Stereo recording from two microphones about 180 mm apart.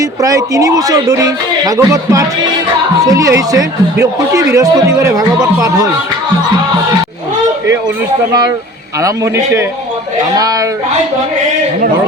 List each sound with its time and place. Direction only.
0.0 s speech: 20° right (ahead or behind)
8.3 s a man's voice: 20° right (ahead or behind)